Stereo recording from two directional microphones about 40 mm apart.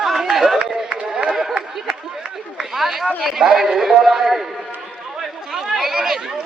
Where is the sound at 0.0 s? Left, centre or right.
Centre.